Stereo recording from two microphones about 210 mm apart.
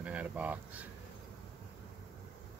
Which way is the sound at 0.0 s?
5° right (ahead or behind).